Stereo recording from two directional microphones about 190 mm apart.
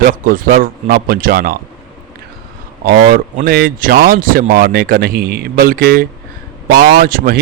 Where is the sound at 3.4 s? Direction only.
50° right (ahead or behind).